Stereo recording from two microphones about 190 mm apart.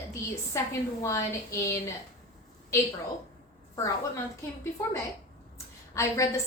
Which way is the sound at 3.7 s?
15° left (ahead or behind).